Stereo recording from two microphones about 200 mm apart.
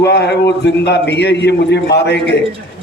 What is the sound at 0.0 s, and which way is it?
A man's voice, 55° left (ahead or behind).